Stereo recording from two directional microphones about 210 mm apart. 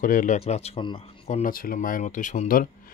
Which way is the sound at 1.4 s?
40° left (ahead or behind).